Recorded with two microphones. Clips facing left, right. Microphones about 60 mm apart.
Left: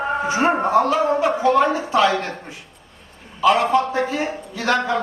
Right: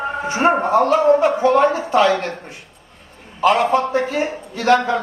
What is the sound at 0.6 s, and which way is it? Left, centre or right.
A man's voice, right.